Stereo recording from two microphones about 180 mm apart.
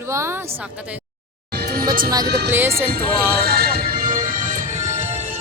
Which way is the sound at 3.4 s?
60° right (ahead or behind).